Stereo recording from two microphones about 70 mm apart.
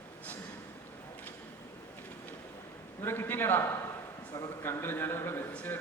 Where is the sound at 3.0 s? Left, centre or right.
Left.